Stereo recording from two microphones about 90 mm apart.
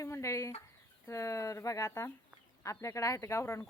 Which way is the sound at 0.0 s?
35° left (ahead or behind).